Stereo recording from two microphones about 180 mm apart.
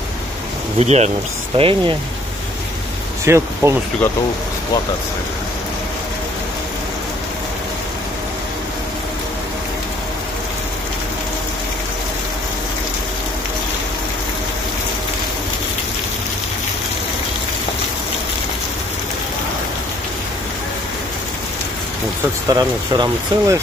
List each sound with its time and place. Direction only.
0.7 s speech: 40° right (ahead or behind)
3.3 s speech: 15° right (ahead or behind)
22.5 s speech: 20° right (ahead or behind)